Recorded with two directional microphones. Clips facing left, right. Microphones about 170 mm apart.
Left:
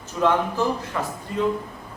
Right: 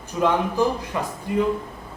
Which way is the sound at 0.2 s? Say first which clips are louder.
Right 1 dB; 15° right (ahead or behind).